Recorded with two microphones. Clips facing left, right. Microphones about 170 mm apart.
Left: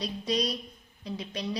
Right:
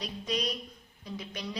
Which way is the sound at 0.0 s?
35° left (ahead or behind).